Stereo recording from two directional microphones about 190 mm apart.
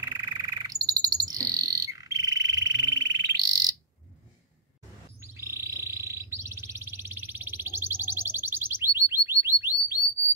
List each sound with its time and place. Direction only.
0.0 s bird: 20° right (ahead or behind)
5.2 s bird: 15° right (ahead or behind)